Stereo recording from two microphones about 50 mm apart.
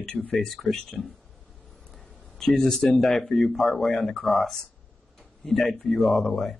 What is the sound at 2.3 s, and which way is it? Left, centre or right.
A man's voice, centre.